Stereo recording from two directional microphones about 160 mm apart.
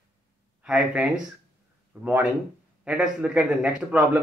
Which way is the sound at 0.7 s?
5° right (ahead or behind).